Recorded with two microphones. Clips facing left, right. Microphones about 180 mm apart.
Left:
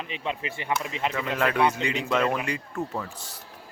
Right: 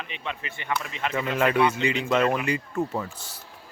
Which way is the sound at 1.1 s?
Centre (ahead or behind).